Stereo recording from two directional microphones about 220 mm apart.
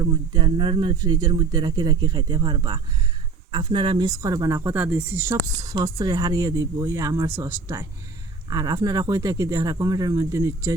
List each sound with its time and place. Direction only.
0.0 s speech: 20° right (ahead or behind)